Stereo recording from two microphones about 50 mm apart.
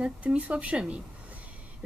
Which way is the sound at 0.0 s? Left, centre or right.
Right.